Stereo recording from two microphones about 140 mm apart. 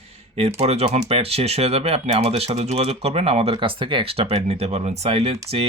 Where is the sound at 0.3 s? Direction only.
45° right (ahead or behind).